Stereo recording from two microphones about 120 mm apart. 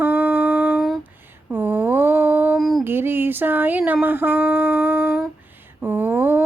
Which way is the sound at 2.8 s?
20° right (ahead or behind).